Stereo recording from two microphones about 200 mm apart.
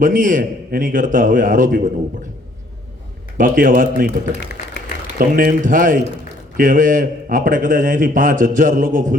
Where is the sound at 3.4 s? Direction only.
45° right (ahead or behind).